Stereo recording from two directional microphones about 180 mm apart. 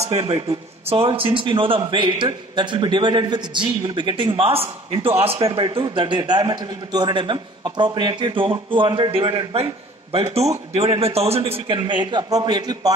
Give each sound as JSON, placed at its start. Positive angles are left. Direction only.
{"t": 0.0, "sound": "a man's voice", "side_deg": -35}